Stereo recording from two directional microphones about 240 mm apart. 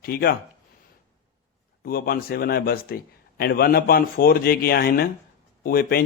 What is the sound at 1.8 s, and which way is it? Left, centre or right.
Speech, left.